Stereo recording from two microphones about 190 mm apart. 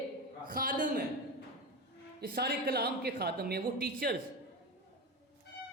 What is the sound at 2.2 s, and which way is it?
A woman's voice, 55° right (ahead or behind).